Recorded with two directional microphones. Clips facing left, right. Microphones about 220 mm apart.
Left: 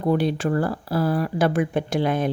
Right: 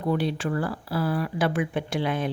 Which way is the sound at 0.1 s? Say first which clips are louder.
Left 4 dB; 45° left (ahead or behind).